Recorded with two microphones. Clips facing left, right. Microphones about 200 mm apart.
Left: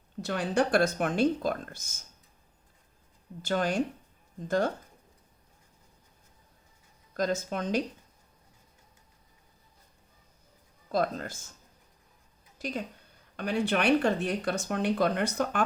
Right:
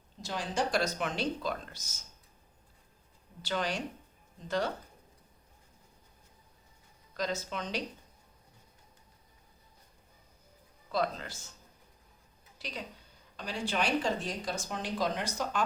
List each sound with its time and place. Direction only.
0.2 s speech: 60° left (ahead or behind)
3.4 s speech: 45° left (ahead or behind)
7.1 s speech: 50° left (ahead or behind)
10.9 s speech: 45° left (ahead or behind)
12.5 s a woman's voice: 50° left (ahead or behind)